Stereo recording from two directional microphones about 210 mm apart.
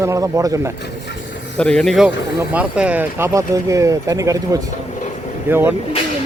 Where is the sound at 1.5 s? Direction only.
5° left (ahead or behind).